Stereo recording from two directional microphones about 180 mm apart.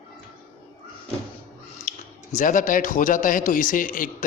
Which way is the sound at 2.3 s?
45° left (ahead or behind).